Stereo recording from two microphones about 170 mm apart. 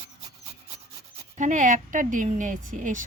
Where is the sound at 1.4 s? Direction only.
45° right (ahead or behind).